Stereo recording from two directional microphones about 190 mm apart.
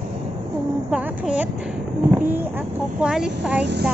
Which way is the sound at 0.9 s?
5° right (ahead or behind).